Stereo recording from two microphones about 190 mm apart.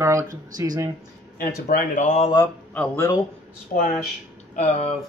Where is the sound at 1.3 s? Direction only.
45° left (ahead or behind).